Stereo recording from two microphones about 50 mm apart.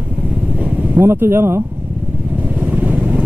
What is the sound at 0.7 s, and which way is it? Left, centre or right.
Speech, right.